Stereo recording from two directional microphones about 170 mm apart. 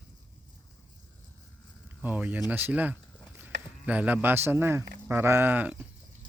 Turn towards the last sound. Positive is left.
turn(degrees=-10)  # may be behind; listen again after turning